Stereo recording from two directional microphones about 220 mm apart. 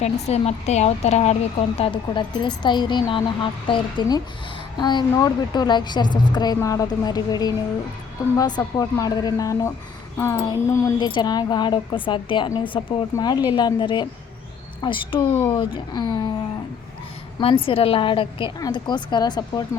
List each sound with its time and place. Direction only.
0.0 s speech: 30° left (ahead or behind)
15.2 s speech: 10° left (ahead or behind)
17.4 s speech: 25° left (ahead or behind)